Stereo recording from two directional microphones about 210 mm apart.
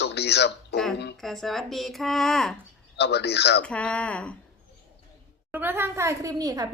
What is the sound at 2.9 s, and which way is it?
Speech, 50° left (ahead or behind).